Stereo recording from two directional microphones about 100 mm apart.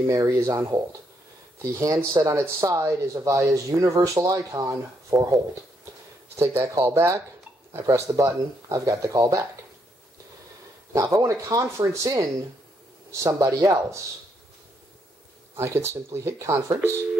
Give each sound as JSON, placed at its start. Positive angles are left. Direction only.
{"t": 0.0, "sound": "speech", "side_deg": -35}
{"t": 10.9, "sound": "speech", "side_deg": -35}
{"t": 15.5, "sound": "speech", "side_deg": -25}